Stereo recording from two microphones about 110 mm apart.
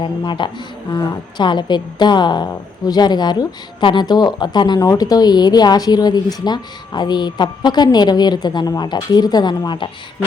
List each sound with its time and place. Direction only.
0.0 s a woman's voice: 45° left (ahead or behind)